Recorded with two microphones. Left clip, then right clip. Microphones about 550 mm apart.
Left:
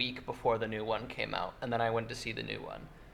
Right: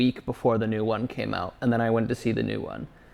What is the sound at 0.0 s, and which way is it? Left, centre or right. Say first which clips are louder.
Speech: right 8 dB; right.